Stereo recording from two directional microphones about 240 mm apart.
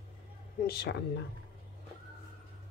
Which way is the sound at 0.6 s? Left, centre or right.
Left.